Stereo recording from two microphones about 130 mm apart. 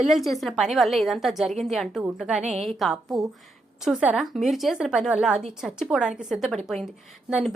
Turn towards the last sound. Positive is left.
turn(degrees=-5)  # may be behind; listen again after turning